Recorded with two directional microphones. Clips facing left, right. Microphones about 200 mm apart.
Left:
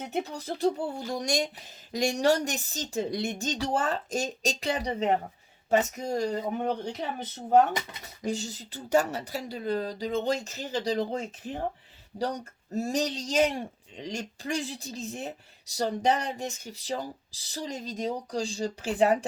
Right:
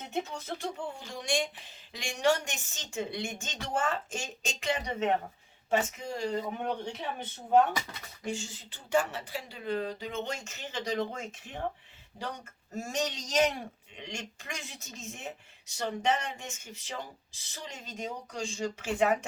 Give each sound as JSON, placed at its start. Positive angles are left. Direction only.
{"t": 0.0, "sound": "speech", "side_deg": 35}
{"t": 8.2, "sound": "speech", "side_deg": 40}